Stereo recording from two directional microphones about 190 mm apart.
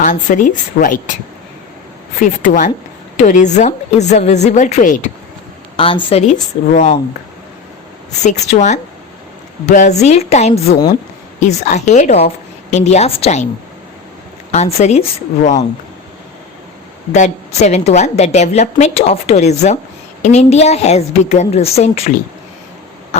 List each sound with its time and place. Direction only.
0.0 s a woman's voice: 40° left (ahead or behind)
2.4 s a woman's voice: 45° left (ahead or behind)
5.7 s a woman's voice: 25° left (ahead or behind)
8.2 s a woman's voice: 35° left (ahead or behind)
14.5 s a woman's voice: 35° left (ahead or behind)
17.1 s a woman's voice: 35° left (ahead or behind)